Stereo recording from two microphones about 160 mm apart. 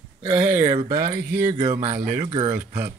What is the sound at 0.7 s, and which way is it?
Speech, 30° right (ahead or behind).